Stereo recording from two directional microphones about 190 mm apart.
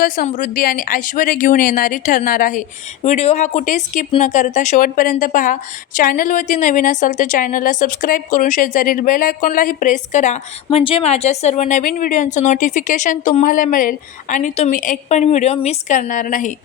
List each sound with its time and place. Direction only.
0.3 s a woman's voice: 45° left (ahead or behind)